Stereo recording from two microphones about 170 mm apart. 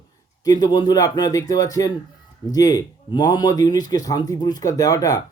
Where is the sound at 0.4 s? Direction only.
20° left (ahead or behind).